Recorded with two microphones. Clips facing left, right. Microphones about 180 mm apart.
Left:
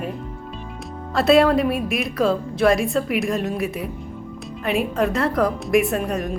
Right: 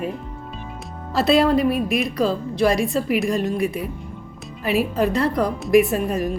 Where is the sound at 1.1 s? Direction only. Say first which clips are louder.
Left 1 dB; centre (ahead or behind).